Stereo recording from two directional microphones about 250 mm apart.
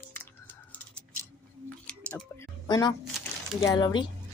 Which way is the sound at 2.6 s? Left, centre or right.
Centre.